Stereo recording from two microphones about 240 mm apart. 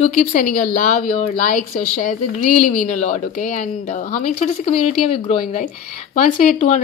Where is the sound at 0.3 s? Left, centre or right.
Left.